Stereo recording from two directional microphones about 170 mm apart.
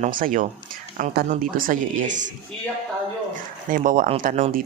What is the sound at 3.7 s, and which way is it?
Speech, 50° right (ahead or behind).